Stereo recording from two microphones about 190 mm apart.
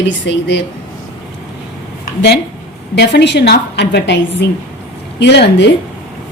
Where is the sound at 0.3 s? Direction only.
65° left (ahead or behind).